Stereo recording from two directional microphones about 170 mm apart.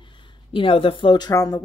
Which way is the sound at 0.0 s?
30° left (ahead or behind).